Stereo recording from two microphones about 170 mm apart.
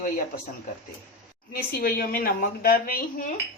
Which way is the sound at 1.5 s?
60° left (ahead or behind).